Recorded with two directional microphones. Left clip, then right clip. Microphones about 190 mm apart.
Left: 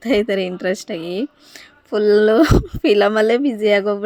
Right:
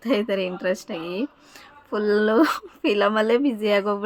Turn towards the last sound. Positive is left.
turn(degrees=15)  # may be behind; listen again after turning